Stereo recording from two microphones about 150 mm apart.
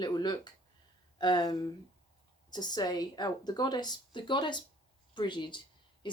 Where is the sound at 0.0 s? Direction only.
30° left (ahead or behind).